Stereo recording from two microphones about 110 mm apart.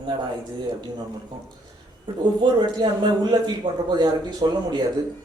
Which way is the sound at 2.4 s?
45° right (ahead or behind).